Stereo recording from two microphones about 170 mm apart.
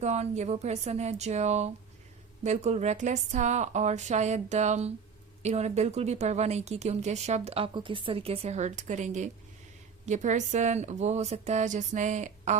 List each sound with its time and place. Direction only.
0.0 s a woman's voice: 40° right (ahead or behind)